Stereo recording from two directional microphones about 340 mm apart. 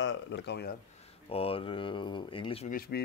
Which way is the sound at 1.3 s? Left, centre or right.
Centre.